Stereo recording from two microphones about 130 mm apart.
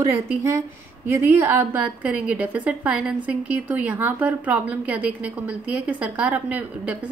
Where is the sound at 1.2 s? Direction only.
15° right (ahead or behind).